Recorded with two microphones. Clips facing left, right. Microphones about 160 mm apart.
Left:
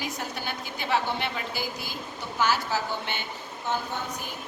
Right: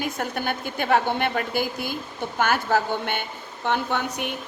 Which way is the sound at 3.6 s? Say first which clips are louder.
Right 6 dB; 70° right (ahead or behind).